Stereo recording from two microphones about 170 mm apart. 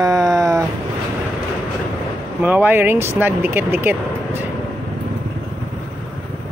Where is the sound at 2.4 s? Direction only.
10° right (ahead or behind).